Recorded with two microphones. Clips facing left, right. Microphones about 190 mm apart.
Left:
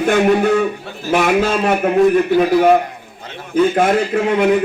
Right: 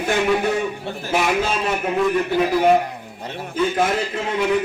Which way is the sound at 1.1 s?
55° left (ahead or behind).